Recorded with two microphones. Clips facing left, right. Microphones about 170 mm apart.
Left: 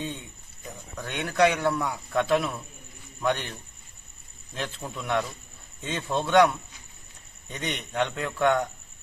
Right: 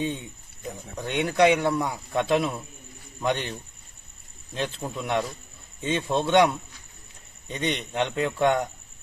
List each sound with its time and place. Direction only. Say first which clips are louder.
0.9 s a man's voice: right 2 dB; 15° right (ahead or behind)
4.5 s a man's voice: right 4 dB; 20° right (ahead or behind)